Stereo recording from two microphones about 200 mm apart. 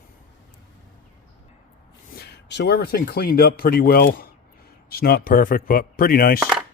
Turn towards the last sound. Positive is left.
turn(degrees=45)  # may be behind; listen again after turning